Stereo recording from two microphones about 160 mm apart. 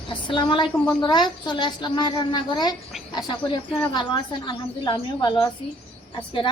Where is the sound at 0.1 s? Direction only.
30° left (ahead or behind).